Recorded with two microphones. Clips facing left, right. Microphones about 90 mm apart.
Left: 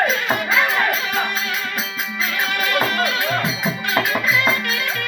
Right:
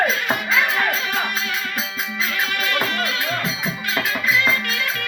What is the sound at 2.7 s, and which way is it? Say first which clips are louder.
Music: left 5 dB; 10° left (ahead or behind).